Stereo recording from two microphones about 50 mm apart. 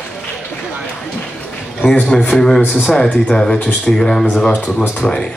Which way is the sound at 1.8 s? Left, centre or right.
Left.